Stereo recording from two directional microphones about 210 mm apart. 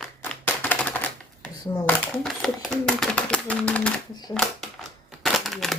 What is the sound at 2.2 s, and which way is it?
Speech, centre (ahead or behind).